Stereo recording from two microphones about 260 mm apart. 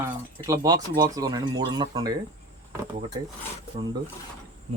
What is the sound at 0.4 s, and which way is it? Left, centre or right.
Speech, centre.